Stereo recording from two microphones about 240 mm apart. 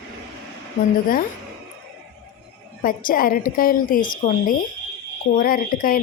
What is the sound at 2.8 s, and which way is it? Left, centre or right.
Speech, left.